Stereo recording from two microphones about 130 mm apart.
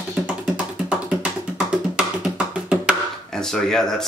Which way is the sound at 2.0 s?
5° right (ahead or behind).